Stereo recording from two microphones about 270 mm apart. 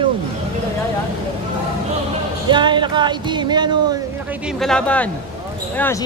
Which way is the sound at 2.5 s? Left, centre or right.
Centre.